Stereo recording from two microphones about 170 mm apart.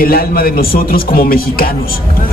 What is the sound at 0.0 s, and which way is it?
Speech, 60° left (ahead or behind).